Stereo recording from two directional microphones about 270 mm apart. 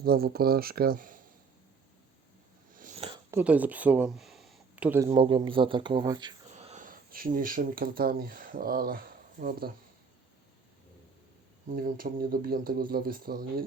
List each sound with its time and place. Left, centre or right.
0.0 s speech: right
2.7 s a sound: right
3.1 s a sound: centre
5.0 s speech: centre
6.5 s speech: right
11.7 s speech: right